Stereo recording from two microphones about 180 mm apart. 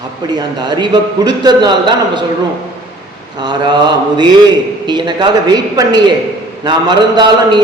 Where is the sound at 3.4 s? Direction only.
25° right (ahead or behind).